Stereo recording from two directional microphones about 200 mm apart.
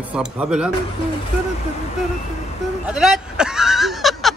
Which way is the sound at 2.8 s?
5° right (ahead or behind).